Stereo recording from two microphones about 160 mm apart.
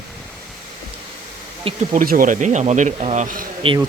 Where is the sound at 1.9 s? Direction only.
60° right (ahead or behind).